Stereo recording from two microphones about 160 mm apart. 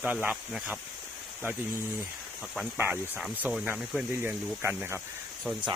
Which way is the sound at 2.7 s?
10° right (ahead or behind).